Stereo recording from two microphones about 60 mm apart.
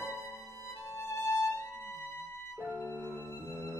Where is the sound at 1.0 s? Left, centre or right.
Left.